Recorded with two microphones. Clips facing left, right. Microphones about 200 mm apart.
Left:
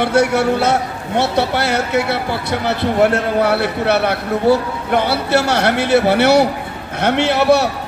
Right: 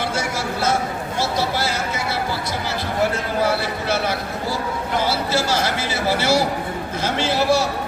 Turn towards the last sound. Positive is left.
turn(degrees=65)  # may be behind; listen again after turning